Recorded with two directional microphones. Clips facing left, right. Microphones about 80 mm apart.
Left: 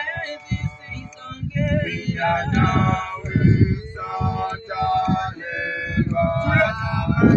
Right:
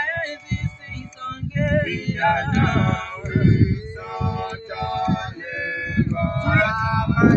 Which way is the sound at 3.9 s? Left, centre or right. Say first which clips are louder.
Left 2 dB; centre.